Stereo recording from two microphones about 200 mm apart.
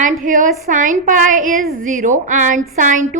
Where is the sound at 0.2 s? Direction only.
40° right (ahead or behind).